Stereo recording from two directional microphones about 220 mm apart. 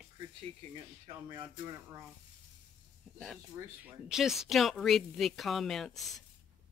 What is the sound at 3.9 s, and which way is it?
Speech, 5° right (ahead or behind).